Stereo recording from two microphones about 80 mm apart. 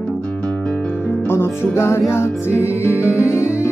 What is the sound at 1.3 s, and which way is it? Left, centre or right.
Music, left.